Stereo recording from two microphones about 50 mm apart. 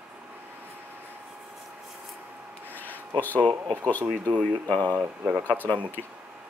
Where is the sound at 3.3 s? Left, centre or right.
Right.